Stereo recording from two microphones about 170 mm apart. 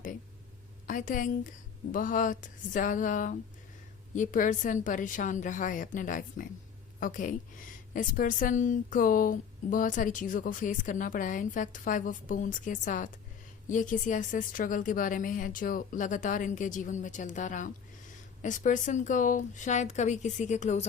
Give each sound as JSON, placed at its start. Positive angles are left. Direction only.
{"t": 0.9, "sound": "speech", "side_deg": 50}